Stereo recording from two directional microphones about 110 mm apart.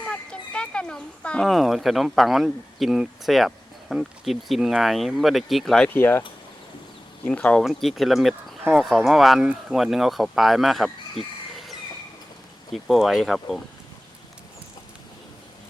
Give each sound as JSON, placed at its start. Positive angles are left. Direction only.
{"t": 0.1, "sound": "a sound", "side_deg": 10}
{"t": 1.5, "sound": "speech", "side_deg": 0}
{"t": 5.9, "sound": "speech", "side_deg": 20}
{"t": 7.3, "sound": "speech", "side_deg": 10}
{"t": 7.6, "sound": "speech", "side_deg": 0}
{"t": 11.2, "sound": "chicken", "side_deg": 0}
{"t": 12.7, "sound": "speech", "side_deg": 0}